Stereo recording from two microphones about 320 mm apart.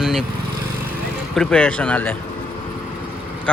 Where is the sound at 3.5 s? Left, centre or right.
Centre.